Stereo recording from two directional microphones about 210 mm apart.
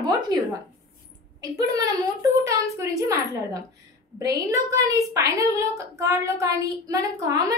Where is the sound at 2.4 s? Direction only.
15° right (ahead or behind).